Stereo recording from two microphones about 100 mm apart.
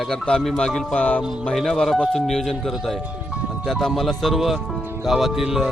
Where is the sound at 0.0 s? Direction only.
5° left (ahead or behind).